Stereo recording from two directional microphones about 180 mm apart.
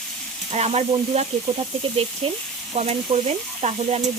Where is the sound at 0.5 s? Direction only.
35° right (ahead or behind).